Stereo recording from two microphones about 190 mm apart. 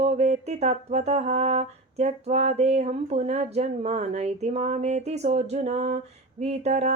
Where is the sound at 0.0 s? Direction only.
35° right (ahead or behind).